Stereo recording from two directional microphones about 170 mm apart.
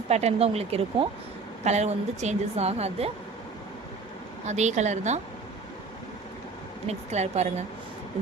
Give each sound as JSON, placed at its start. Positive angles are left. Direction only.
{"t": 0.1, "sound": "a woman's voice", "side_deg": -40}
{"t": 4.4, "sound": "a woman's voice", "side_deg": -45}
{"t": 6.8, "sound": "a woman's voice", "side_deg": -40}